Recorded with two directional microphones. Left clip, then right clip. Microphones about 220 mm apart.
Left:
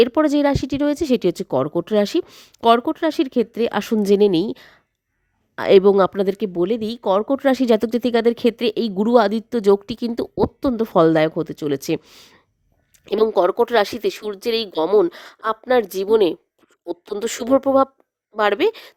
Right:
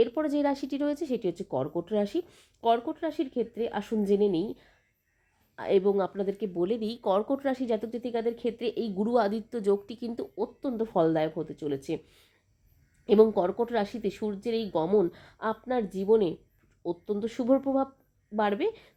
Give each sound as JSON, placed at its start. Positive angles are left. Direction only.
{"t": 0.0, "sound": "speech", "side_deg": 45}